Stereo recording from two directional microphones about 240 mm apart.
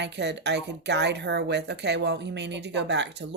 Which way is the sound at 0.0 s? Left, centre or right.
Right.